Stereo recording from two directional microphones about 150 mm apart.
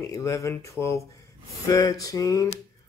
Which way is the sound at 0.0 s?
20° left (ahead or behind).